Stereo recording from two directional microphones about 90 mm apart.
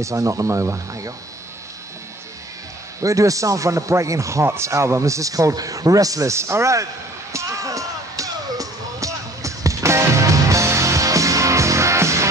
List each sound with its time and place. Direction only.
0.0 s a man's voice: 35° right (ahead or behind)
3.0 s a man's voice: 40° right (ahead or behind)
7.3 s music: 35° right (ahead or behind)